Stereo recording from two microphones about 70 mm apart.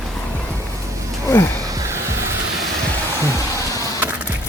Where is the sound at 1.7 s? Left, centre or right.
Right.